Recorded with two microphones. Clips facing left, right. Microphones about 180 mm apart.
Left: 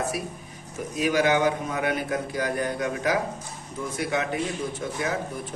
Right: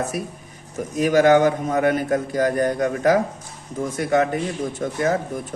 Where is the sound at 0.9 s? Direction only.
45° right (ahead or behind).